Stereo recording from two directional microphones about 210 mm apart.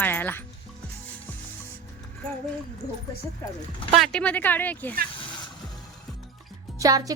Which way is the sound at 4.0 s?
5° left (ahead or behind).